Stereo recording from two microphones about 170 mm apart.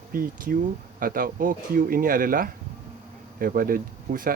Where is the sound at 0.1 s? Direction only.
55° right (ahead or behind).